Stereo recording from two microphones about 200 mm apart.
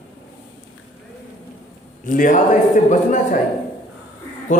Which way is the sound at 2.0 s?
40° left (ahead or behind).